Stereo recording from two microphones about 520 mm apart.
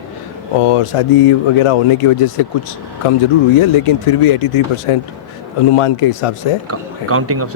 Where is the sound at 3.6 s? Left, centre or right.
Left.